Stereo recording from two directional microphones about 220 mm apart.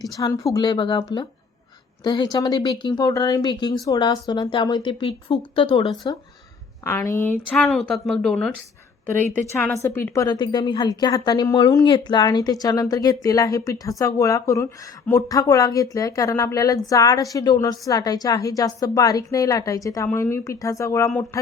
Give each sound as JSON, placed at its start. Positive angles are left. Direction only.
{"t": 0.0, "sound": "a woman's voice", "side_deg": 15}
{"t": 2.0, "sound": "a woman's voice", "side_deg": 20}